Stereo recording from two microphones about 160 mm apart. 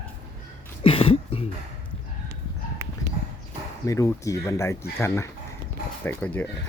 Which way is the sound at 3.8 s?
20° left (ahead or behind).